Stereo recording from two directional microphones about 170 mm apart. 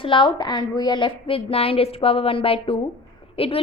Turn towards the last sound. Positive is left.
turn(degrees=35)  # may be behind; listen again after turning